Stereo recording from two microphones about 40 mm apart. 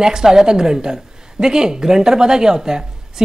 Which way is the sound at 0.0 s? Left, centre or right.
Centre.